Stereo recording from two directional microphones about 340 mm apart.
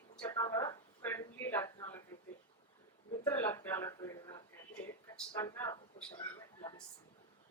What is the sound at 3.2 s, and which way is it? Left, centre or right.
Speech, centre.